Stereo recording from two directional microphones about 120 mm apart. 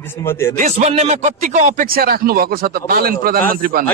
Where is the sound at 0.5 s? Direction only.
75° right (ahead or behind).